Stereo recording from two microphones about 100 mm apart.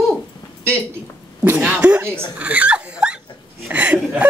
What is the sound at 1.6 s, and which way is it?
Speech, 10° right (ahead or behind).